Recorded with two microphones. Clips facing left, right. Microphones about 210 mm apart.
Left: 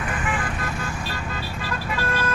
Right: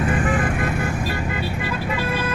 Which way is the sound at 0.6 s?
60° right (ahead or behind).